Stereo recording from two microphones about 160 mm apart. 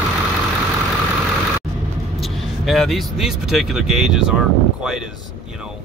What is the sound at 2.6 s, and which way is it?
Speech, centre (ahead or behind).